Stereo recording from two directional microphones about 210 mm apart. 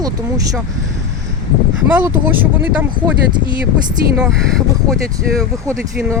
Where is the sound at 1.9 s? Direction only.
10° right (ahead or behind).